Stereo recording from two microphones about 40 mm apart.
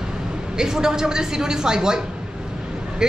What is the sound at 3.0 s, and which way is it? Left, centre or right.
Speech, centre.